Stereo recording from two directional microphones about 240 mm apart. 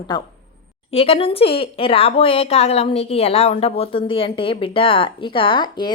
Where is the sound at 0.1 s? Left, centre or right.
Centre.